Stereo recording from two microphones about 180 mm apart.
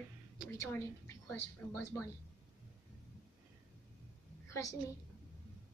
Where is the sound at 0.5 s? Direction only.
15° left (ahead or behind).